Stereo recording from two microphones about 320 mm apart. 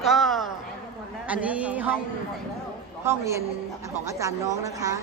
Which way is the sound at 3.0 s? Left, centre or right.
Centre.